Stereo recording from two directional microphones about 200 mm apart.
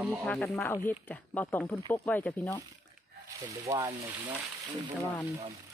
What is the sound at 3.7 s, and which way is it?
Speech, 15° right (ahead or behind).